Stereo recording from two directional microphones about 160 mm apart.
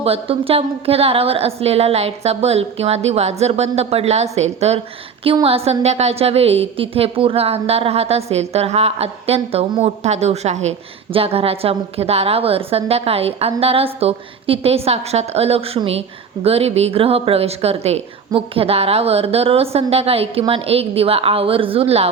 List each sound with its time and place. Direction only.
0.0 s a woman's voice: 35° right (ahead or behind)